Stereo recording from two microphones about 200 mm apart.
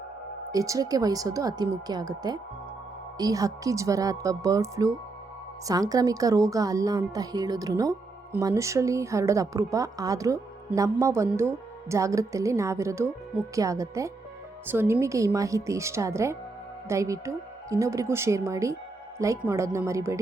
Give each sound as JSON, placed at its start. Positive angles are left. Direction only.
{"t": 0.5, "sound": "speech", "side_deg": -15}